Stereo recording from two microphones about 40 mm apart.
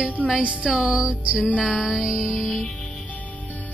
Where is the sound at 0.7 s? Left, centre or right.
Right.